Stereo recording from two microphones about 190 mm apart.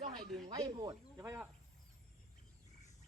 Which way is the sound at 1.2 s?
10° right (ahead or behind).